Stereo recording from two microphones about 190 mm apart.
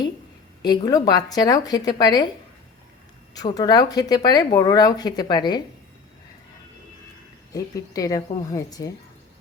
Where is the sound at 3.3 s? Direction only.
20° left (ahead or behind).